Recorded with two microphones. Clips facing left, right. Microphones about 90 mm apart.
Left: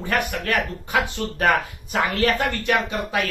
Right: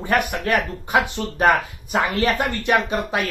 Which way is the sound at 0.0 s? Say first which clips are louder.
Right 3 dB; 20° right (ahead or behind).